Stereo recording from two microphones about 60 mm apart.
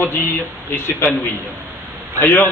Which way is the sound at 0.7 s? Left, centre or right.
Left.